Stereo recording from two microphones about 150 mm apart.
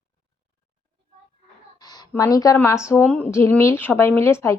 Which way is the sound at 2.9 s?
10° left (ahead or behind).